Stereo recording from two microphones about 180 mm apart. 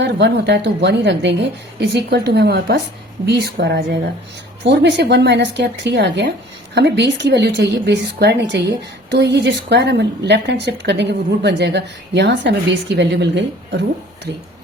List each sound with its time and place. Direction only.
0.0 s a woman's voice: 70° right (ahead or behind)